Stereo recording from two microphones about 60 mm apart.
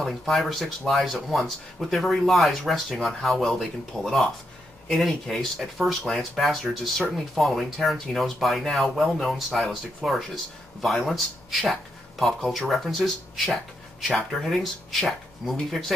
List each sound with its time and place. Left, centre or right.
0.3 s speech: centre